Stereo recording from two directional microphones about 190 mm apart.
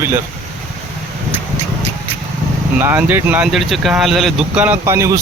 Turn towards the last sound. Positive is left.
turn(degrees=-15)  # may be behind; listen again after turning